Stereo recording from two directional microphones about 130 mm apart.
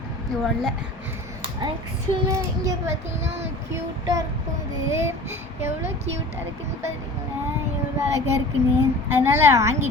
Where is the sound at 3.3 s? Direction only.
55° right (ahead or behind).